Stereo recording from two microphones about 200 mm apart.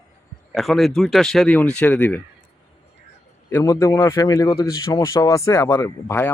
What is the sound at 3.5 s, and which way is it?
Speech, 15° left (ahead or behind).